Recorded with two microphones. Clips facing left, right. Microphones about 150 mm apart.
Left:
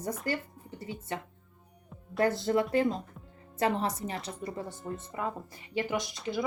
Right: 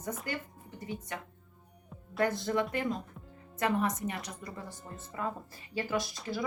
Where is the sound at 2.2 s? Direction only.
30° left (ahead or behind).